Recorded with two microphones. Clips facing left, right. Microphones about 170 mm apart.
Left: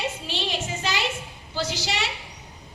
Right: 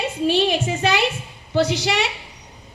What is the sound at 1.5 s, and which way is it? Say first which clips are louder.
Speech: right 9 dB; 60° right (ahead or behind).